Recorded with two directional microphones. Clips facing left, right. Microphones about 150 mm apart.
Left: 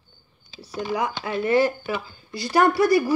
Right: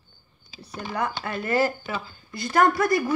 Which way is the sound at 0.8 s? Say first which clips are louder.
Left 2 dB; 10° left (ahead or behind).